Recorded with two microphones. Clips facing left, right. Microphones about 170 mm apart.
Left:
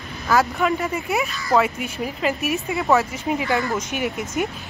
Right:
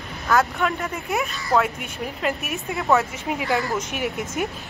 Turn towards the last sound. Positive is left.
turn(degrees=0)  # may be behind; listen again after turning